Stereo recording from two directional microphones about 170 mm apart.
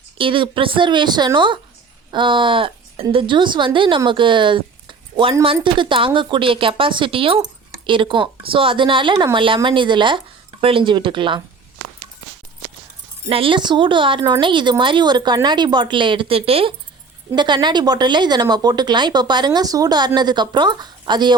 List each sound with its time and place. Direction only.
0.2 s a woman's voice: 30° right (ahead or behind)
13.2 s speech: 35° right (ahead or behind)